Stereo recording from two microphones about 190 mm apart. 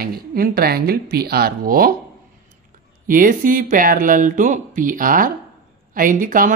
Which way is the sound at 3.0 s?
45° right (ahead or behind).